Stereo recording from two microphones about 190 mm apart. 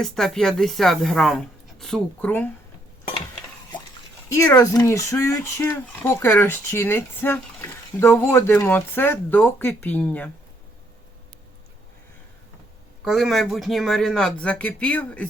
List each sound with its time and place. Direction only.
0.0 s speech: 5° left (ahead or behind)
4.3 s speech: 15° left (ahead or behind)
13.1 s speech: centre (ahead or behind)